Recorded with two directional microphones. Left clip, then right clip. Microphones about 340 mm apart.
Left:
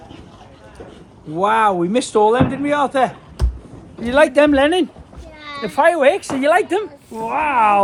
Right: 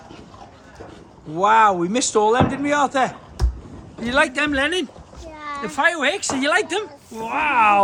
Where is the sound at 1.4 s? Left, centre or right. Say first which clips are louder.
Even; centre.